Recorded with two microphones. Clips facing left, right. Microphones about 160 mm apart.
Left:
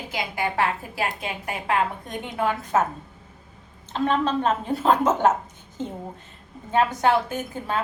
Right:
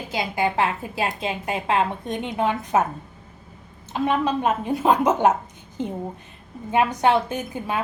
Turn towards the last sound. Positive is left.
turn(degrees=-15)  # may be behind; listen again after turning